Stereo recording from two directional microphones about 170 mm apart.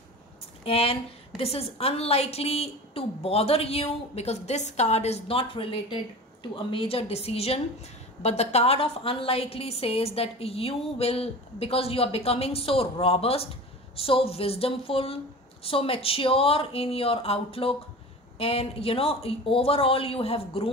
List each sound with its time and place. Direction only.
0.7 s a woman's voice: 35° left (ahead or behind)